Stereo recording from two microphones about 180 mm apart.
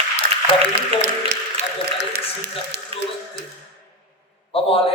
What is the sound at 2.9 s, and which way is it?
Speech, 35° right (ahead or behind).